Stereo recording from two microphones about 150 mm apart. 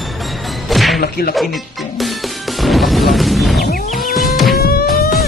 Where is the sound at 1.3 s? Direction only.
Centre (ahead or behind).